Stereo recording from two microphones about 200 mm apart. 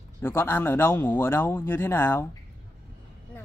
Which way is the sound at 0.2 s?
10° left (ahead or behind).